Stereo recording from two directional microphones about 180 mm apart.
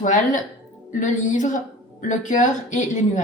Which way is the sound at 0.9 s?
45° left (ahead or behind).